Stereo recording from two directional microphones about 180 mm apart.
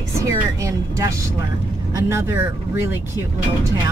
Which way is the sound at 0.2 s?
15° right (ahead or behind).